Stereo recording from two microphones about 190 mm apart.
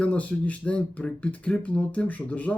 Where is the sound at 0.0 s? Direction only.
5° left (ahead or behind).